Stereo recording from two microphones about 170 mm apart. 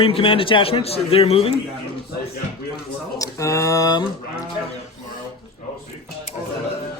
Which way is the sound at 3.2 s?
20° left (ahead or behind).